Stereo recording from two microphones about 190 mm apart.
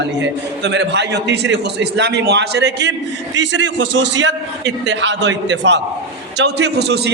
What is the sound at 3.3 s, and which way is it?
A man's voice, 75° right (ahead or behind).